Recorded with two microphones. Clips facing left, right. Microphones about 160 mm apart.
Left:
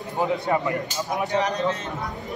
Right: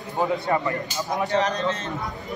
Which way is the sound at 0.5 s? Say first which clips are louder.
Even; 20° left (ahead or behind).